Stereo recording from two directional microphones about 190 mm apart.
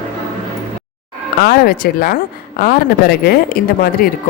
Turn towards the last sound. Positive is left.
turn(degrees=55)  # may be behind; listen again after turning